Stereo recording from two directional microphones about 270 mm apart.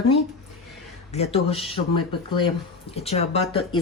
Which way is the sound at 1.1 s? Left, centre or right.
Left.